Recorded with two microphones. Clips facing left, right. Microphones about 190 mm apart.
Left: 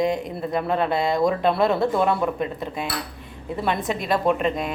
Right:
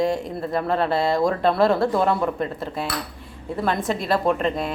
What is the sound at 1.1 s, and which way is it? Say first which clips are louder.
Speech: even; centre (ahead or behind).